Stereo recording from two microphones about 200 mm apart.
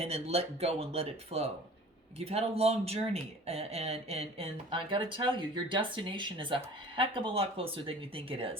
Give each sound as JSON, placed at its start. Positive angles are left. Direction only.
{"t": 0.0, "sound": "speech", "side_deg": -30}